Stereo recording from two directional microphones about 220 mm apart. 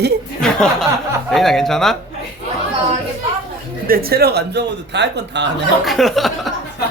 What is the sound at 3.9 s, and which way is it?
A man's voice, 45° right (ahead or behind).